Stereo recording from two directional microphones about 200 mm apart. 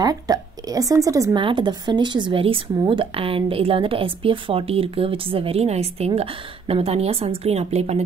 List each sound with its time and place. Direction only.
0.0 s a woman's voice: 20° right (ahead or behind)